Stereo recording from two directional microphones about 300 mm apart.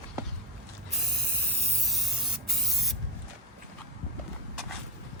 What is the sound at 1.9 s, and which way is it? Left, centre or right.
Spray, centre.